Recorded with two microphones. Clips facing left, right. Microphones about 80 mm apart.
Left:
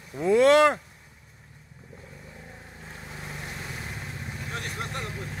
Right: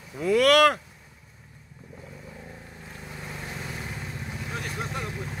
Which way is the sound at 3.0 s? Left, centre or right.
Centre.